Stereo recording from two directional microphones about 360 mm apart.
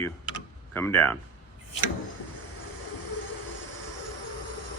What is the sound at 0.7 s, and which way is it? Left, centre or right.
Mantra, centre.